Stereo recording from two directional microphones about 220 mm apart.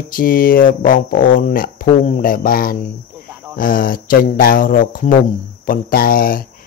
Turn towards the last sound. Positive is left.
turn(degrees=40)  # may be behind; listen again after turning